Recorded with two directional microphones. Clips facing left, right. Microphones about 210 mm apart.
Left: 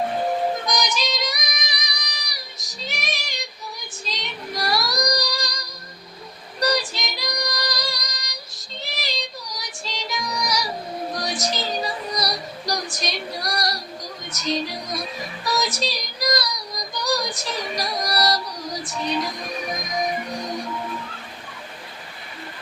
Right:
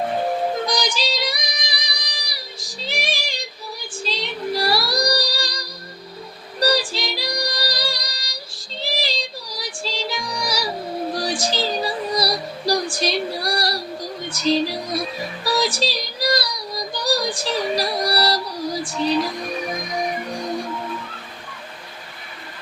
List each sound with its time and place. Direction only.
0.6 s female singing: 30° right (ahead or behind)
4.0 s music: 30° right (ahead or behind)
15.5 s child singing: 30° right (ahead or behind)